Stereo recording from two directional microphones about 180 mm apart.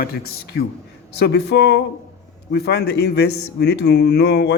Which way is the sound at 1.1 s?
65° left (ahead or behind).